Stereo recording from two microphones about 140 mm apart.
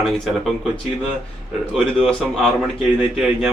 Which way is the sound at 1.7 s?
Centre (ahead or behind).